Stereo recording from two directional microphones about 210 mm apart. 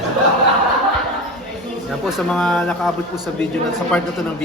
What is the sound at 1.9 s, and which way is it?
Speech, centre (ahead or behind).